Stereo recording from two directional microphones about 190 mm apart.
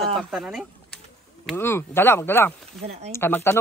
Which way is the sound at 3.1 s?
15° left (ahead or behind).